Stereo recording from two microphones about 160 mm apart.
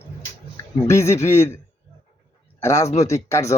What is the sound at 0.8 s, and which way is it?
Speech, 15° left (ahead or behind).